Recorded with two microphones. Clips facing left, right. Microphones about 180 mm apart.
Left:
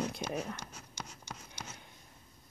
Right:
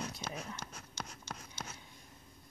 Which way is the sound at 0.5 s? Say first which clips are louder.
Even; 10° left (ahead or behind).